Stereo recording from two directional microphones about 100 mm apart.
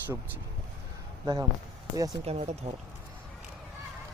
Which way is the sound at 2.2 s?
90° right.